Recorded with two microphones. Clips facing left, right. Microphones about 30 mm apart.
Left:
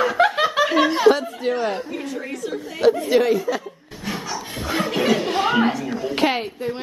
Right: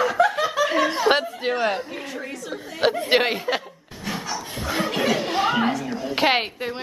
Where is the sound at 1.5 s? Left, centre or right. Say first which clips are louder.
Even; centre.